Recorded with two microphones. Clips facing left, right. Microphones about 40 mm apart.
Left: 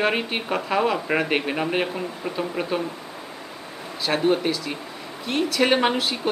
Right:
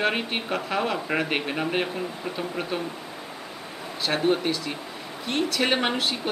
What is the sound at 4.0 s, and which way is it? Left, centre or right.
Speech, centre.